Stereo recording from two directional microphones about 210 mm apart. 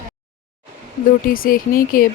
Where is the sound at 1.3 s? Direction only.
45° left (ahead or behind).